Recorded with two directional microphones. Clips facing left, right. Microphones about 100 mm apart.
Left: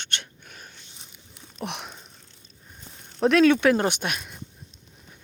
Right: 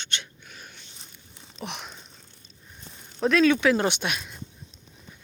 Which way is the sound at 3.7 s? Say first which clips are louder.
Left 1 dB; 45° left (ahead or behind).